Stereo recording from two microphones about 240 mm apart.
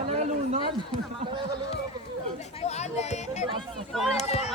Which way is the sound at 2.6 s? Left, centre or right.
Left.